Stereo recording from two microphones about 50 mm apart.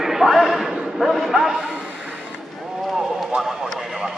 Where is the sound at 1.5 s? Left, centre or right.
Right.